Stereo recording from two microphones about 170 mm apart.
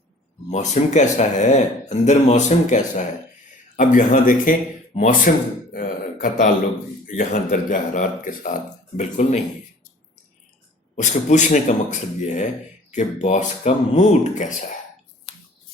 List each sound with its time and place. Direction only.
0.5 s speech: 45° left (ahead or behind)
10.9 s speech: 45° left (ahead or behind)